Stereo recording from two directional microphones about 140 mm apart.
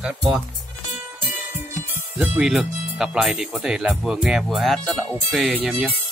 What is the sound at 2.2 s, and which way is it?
Speech, 5° right (ahead or behind).